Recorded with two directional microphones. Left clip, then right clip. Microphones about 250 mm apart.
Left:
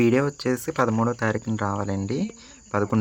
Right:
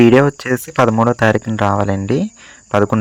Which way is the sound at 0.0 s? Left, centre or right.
Right.